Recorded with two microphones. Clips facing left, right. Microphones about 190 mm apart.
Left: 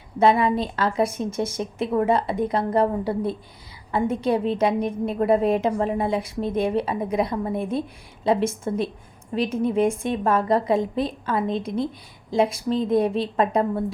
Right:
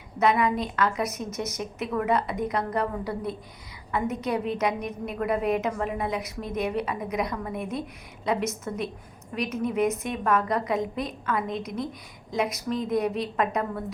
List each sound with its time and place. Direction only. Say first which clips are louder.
0.2 s a woman's voice: left 4 dB; 30° left (ahead or behind)